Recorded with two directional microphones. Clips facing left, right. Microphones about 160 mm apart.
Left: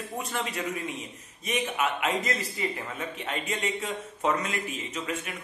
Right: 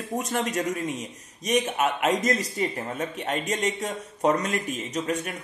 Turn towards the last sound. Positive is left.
turn(degrees=-40)  # may be behind; listen again after turning